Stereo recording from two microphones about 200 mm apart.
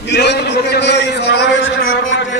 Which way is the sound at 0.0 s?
60° left (ahead or behind).